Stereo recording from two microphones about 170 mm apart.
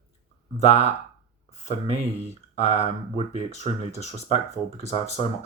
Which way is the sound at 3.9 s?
40° left (ahead or behind).